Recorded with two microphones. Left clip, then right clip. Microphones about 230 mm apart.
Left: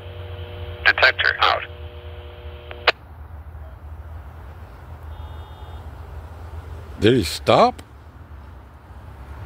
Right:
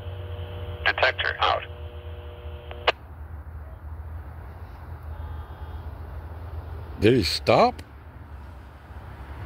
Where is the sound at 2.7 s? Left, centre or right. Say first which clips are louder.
Left 5 dB; left.